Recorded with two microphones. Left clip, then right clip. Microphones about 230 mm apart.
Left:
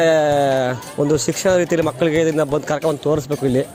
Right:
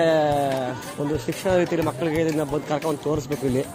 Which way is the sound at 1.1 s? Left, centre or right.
Left.